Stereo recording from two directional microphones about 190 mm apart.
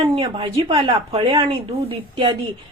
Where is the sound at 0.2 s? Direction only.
30° right (ahead or behind).